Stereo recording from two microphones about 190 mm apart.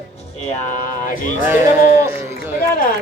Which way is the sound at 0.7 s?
45° left (ahead or behind).